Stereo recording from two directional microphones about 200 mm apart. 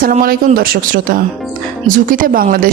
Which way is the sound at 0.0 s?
45° right (ahead or behind).